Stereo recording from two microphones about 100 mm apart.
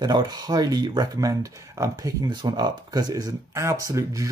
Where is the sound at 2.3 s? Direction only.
45° right (ahead or behind).